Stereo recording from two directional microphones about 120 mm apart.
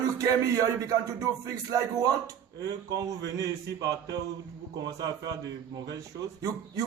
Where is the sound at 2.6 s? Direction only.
30° right (ahead or behind).